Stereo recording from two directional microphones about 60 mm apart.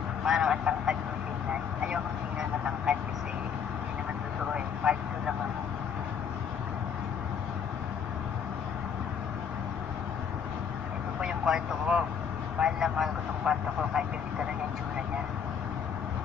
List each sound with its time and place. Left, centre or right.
0.2 s speech: centre
2.6 s vehicle: centre
4.5 s vehicle: centre
11.1 s vehicle: centre
12.5 s speech: centre